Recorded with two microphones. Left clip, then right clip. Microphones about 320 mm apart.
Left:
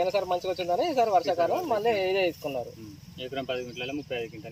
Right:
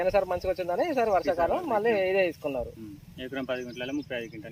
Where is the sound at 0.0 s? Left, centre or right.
Right.